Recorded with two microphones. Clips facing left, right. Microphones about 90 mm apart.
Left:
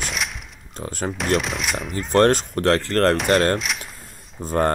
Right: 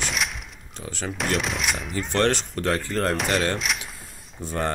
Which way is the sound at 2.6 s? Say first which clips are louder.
Left 6 dB; 90° left.